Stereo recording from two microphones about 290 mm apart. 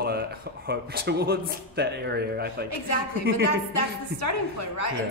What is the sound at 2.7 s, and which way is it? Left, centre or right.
A woman's voice, left.